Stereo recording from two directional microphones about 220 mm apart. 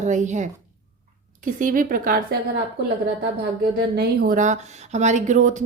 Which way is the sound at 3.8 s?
45° right (ahead or behind).